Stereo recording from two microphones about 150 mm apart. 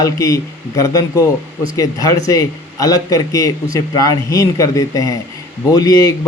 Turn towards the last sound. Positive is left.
turn(degrees=25)  # may be behind; listen again after turning